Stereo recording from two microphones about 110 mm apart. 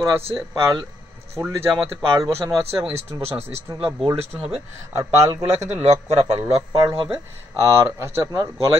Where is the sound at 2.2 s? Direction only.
30° right (ahead or behind).